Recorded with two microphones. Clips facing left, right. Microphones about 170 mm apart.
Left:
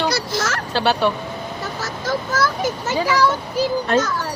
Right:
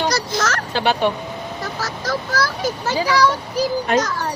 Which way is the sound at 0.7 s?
15° right (ahead or behind).